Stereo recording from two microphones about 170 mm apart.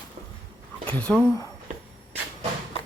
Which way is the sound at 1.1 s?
5° left (ahead or behind).